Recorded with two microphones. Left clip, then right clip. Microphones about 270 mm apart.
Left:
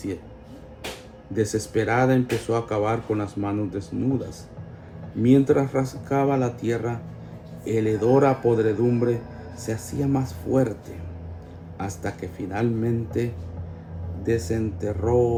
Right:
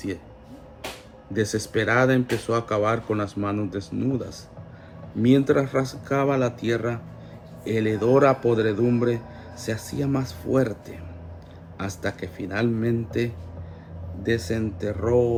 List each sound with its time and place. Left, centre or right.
1.4 s speech: right
12.0 s speech: right
14.3 s speech: right